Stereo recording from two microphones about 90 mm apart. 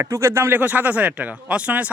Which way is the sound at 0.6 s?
20° right (ahead or behind).